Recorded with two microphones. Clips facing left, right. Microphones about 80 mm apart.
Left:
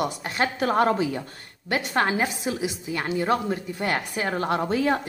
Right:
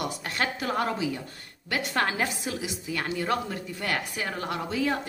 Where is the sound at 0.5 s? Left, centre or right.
Left.